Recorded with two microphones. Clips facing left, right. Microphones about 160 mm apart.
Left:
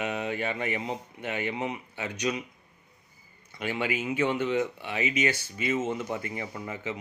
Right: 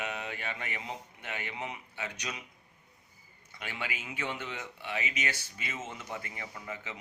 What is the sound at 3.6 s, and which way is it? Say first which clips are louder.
Speech: left 10 dB; 20° left (ahead or behind).